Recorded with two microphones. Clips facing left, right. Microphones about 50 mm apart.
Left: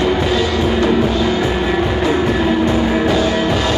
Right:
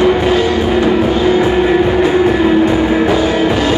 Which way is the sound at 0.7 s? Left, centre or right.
Centre.